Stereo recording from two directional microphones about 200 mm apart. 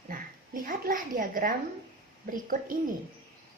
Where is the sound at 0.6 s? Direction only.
45° right (ahead or behind).